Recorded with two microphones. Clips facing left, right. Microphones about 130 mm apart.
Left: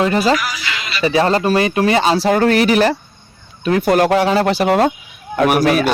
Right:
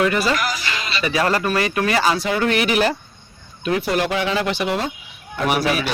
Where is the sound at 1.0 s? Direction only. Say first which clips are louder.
Left 6 dB; 25° left (ahead or behind).